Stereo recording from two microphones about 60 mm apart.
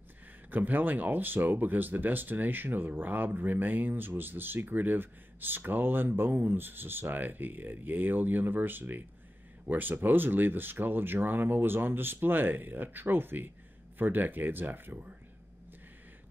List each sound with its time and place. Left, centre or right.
0.5 s speech: right